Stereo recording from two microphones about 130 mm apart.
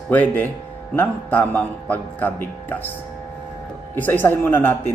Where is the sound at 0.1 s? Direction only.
15° left (ahead or behind).